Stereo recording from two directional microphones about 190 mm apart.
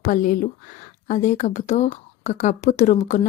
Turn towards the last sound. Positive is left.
turn(degrees=40)  # may be behind; listen again after turning